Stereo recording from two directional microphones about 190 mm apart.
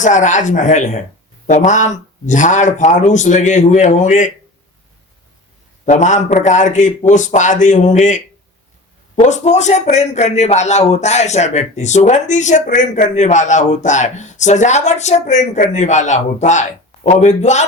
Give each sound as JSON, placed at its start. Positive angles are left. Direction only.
{"t": 0.0, "sound": "speech", "side_deg": 40}
{"t": 5.8, "sound": "speech", "side_deg": 40}